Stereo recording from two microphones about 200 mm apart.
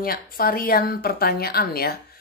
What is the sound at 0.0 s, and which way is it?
Speech, 45° left (ahead or behind).